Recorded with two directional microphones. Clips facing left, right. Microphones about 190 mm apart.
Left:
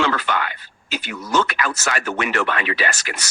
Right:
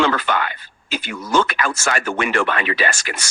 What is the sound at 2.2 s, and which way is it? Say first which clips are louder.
Speech: right 2 dB; 25° right (ahead or behind).